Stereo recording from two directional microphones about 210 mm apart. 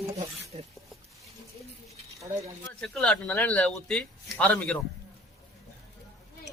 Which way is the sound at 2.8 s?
5° left (ahead or behind).